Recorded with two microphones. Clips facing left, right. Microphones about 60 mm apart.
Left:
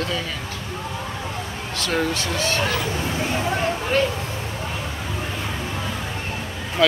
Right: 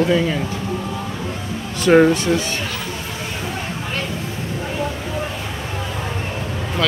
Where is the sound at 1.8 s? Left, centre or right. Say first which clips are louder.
Right 11 dB; right.